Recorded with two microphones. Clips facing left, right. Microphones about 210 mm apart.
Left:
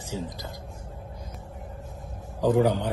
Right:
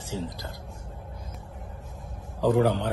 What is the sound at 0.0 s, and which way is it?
Speech, 50° left (ahead or behind).